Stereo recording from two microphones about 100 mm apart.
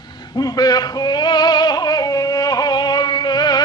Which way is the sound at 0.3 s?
40° left (ahead or behind).